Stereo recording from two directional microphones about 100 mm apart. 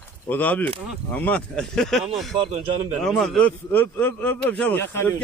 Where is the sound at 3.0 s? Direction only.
5° left (ahead or behind).